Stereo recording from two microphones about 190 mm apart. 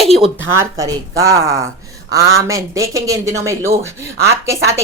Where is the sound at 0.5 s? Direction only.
15° right (ahead or behind).